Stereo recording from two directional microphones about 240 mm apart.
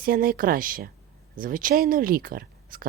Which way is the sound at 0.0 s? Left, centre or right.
Right.